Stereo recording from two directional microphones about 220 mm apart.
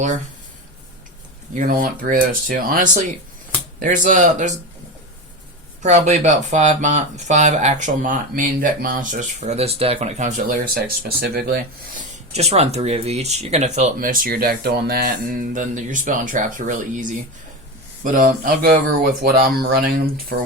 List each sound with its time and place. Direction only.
1.5 s speech: 35° right (ahead or behind)
5.8 s speech: 30° right (ahead or behind)
12.3 s speech: 30° right (ahead or behind); by 20.5 s 45° right (ahead or behind)